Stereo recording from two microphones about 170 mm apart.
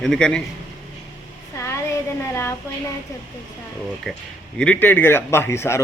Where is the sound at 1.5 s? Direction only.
15° left (ahead or behind).